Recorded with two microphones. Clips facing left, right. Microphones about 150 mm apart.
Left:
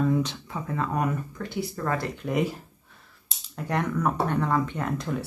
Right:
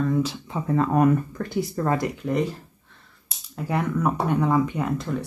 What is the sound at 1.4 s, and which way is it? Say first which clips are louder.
Speech: right 4 dB; 55° right (ahead or behind).